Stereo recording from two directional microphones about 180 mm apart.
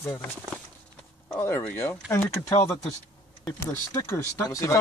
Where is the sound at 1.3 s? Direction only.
15° left (ahead or behind).